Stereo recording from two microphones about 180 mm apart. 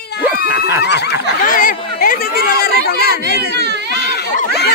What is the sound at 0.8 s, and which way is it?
Speech, 70° left (ahead or behind).